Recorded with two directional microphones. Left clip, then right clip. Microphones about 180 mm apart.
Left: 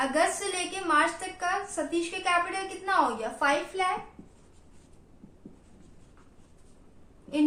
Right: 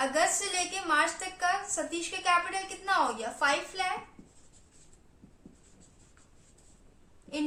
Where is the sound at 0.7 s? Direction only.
25° right (ahead or behind).